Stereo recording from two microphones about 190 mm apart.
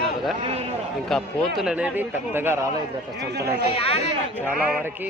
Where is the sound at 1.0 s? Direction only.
Centre (ahead or behind).